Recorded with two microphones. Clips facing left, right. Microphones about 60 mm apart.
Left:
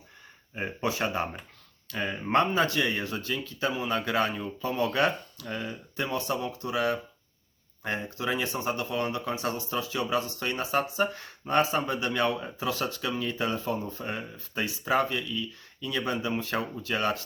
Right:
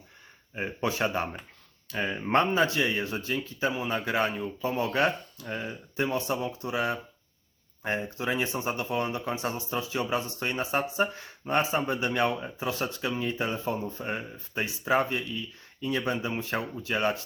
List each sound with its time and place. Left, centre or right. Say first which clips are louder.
0.8 s speech: right 1 dB; right